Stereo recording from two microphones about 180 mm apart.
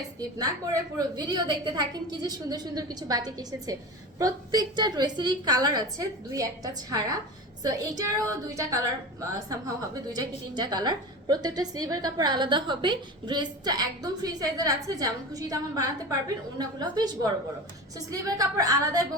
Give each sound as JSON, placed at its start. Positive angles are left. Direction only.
{"t": 0.3, "sound": "a woman's voice", "side_deg": -20}
{"t": 18.1, "sound": "a woman's voice", "side_deg": -20}